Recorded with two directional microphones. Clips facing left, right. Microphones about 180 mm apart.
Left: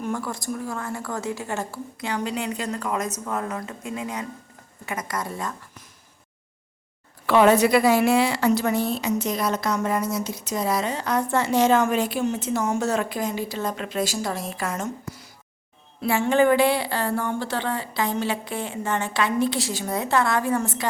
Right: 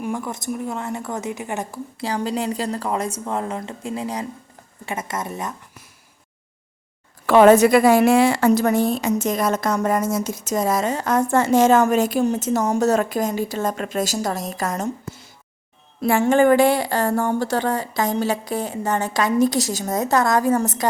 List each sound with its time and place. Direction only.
0.0 s a woman's voice: 15° right (ahead or behind)
2.0 s a woman's voice: 35° right (ahead or behind)
7.3 s a woman's voice: 45° right (ahead or behind)
15.0 s a sound: 25° right (ahead or behind)
16.0 s speech: 45° right (ahead or behind)